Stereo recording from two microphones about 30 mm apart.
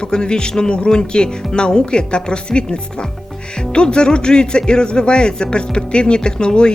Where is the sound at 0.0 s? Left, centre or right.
Left.